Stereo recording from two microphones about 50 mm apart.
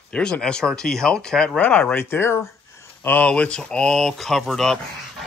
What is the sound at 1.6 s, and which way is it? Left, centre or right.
Speech, left.